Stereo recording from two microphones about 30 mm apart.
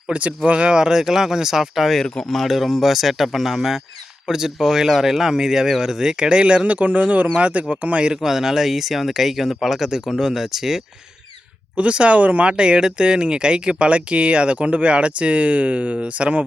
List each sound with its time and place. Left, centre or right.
0.1 s speech: right
0.8 s speech: right; by 1.9 s centre
2.2 s speech: centre
2.5 s speech: centre
6.2 s speech: right
6.7 s speech: right
8.2 s speech: centre
11.8 s speech: right
12.5 s speech: right